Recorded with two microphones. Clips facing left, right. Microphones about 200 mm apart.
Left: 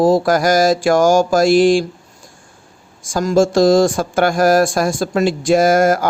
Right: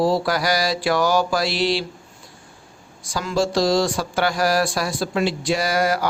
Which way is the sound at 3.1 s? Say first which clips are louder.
Left 8 dB; 45° left (ahead or behind).